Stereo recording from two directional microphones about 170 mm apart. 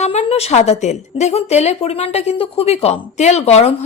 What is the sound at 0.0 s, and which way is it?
A woman's voice, 40° left (ahead or behind).